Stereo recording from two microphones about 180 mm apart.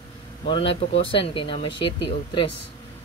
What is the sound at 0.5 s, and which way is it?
Speech, 30° left (ahead or behind).